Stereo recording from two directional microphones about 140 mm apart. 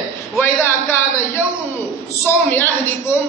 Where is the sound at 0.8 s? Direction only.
20° left (ahead or behind).